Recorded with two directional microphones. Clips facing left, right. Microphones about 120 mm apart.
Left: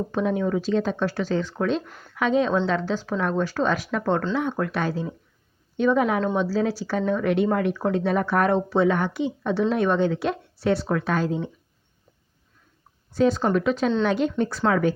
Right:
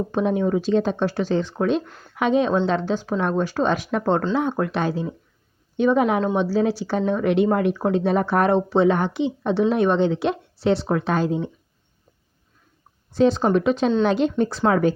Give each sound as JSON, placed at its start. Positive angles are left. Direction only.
{"t": 0.1, "sound": "speech", "side_deg": -20}
{"t": 13.1, "sound": "speech", "side_deg": -25}